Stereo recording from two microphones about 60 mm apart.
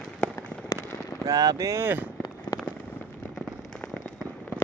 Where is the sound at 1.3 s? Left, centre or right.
Right.